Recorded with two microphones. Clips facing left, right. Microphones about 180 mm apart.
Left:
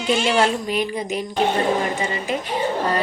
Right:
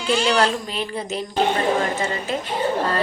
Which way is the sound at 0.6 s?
15° left (ahead or behind).